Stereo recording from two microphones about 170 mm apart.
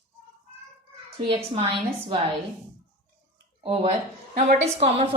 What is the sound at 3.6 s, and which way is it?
A woman's voice, 35° right (ahead or behind).